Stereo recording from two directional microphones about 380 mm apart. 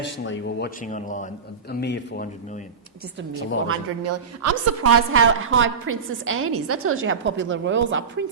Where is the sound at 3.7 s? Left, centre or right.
Right.